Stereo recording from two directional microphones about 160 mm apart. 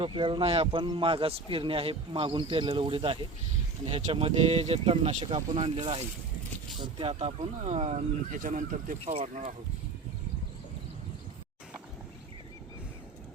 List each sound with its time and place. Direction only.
0.0 s speech: 30° right (ahead or behind)
6.7 s speech: 30° right (ahead or behind)
8.4 s speech: 55° right (ahead or behind)